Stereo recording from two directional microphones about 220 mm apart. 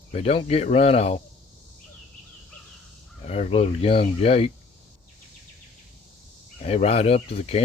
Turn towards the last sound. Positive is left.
turn(degrees=25)  # may be behind; listen again after turning